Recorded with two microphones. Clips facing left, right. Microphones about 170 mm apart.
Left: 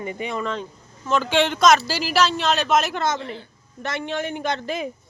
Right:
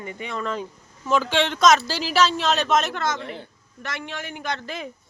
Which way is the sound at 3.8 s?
25° left (ahead or behind).